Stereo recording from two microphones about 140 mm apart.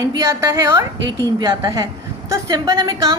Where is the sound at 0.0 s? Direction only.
25° right (ahead or behind).